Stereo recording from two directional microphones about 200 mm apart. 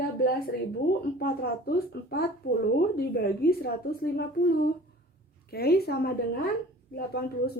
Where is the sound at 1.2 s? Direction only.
50° left (ahead or behind).